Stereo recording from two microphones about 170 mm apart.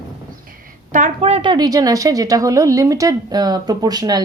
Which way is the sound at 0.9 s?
45° right (ahead or behind).